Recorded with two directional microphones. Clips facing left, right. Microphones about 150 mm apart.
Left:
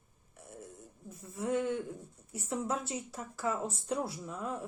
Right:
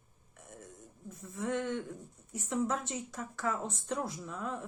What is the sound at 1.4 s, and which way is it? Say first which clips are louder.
Speech: left 2 dB; 10° left (ahead or behind).